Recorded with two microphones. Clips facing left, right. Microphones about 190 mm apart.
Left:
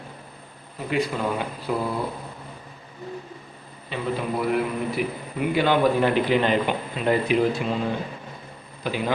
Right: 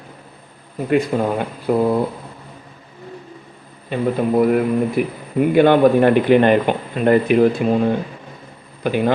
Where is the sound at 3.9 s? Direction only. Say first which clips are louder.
Right 9 dB; 50° right (ahead or behind).